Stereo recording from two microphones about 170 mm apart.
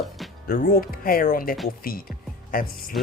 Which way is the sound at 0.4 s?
55° left (ahead or behind).